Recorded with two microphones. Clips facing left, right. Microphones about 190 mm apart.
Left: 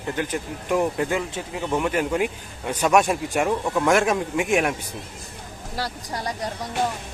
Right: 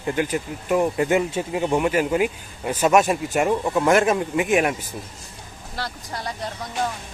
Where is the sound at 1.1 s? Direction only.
20° right (ahead or behind).